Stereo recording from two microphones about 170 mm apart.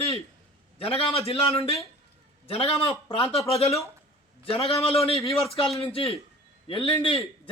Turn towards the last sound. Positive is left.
turn(degrees=30)  # may be behind; listen again after turning